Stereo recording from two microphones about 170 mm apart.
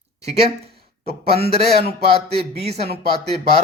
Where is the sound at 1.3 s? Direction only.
35° right (ahead or behind).